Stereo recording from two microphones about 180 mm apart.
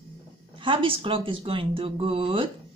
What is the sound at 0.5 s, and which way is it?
Speech, 30° right (ahead or behind).